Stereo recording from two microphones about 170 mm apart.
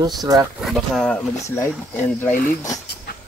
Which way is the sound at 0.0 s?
20° right (ahead or behind).